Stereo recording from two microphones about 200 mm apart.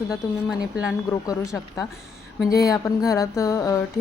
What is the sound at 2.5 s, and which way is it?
A woman's voice, 15° left (ahead or behind).